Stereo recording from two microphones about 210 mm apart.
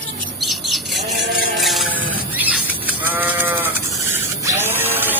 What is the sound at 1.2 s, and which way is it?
Toothbrush, 50° right (ahead or behind).